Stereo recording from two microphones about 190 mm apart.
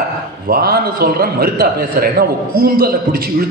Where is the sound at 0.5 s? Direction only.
55° right (ahead or behind).